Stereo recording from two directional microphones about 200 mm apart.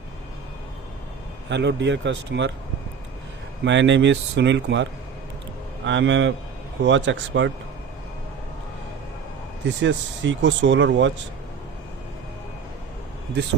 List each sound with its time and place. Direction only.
1.5 s speech: 60° right (ahead or behind)
3.6 s speech: 65° right (ahead or behind)
9.6 s speech: 65° right (ahead or behind)